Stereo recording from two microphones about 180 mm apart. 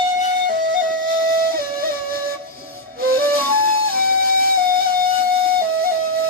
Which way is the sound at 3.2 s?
55° right (ahead or behind).